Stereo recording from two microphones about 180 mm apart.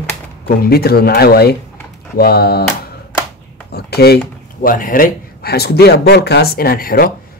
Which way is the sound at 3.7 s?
60° left (ahead or behind).